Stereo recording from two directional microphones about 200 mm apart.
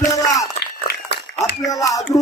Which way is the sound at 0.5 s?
55° left (ahead or behind).